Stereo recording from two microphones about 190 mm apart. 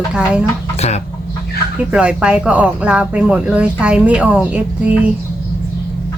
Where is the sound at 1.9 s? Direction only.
5° right (ahead or behind).